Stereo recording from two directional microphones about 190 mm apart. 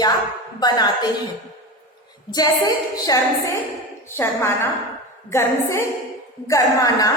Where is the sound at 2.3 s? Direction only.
20° left (ahead or behind).